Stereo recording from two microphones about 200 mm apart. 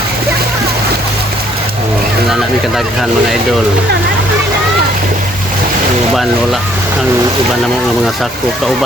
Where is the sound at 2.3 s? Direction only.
Centre (ahead or behind).